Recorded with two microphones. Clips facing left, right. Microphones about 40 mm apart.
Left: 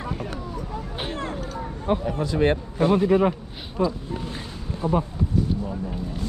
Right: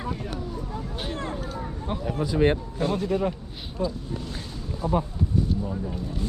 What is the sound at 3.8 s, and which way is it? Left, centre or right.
Speech, left.